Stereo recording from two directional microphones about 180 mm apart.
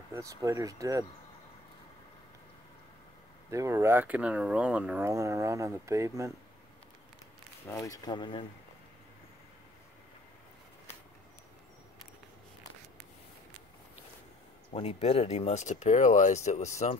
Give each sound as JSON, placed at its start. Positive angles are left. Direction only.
{"t": 0.1, "sound": "speech", "side_deg": -20}
{"t": 3.4, "sound": "speech", "side_deg": -15}
{"t": 7.6, "sound": "speech", "side_deg": 15}
{"t": 14.7, "sound": "speech", "side_deg": 35}